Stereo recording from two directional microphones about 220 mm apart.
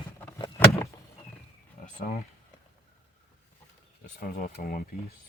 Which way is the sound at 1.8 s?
35° left (ahead or behind).